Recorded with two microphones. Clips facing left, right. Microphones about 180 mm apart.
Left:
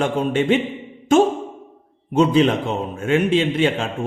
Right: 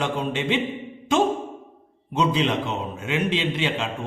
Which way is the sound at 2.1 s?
50° left (ahead or behind).